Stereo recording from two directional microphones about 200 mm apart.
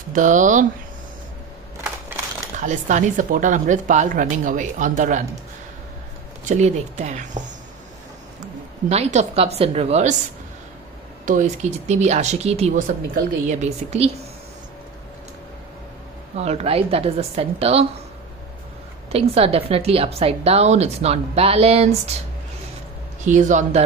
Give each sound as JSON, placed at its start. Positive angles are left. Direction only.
{"t": 0.1, "sound": "a woman's voice", "side_deg": -40}
{"t": 2.6, "sound": "a woman's voice", "side_deg": -40}
{"t": 6.4, "sound": "a woman's voice", "side_deg": -35}
{"t": 8.8, "sound": "a woman's voice", "side_deg": -35}
{"t": 11.2, "sound": "a woman's voice", "side_deg": -40}
{"t": 16.3, "sound": "a woman's voice", "side_deg": -30}
{"t": 19.1, "sound": "a woman's voice", "side_deg": -30}
{"t": 23.2, "sound": "a woman's voice", "side_deg": -40}